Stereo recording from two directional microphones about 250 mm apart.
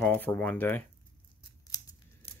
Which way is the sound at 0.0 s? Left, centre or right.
Centre.